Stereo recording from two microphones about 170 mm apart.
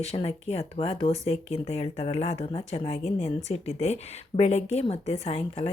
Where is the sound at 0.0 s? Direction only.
35° left (ahead or behind).